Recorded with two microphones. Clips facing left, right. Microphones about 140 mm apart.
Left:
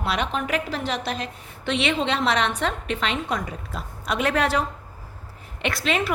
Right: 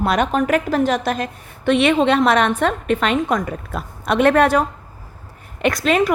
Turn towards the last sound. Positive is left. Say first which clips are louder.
# right 8 dB
turn(degrees=-45)  # may be behind; listen again after turning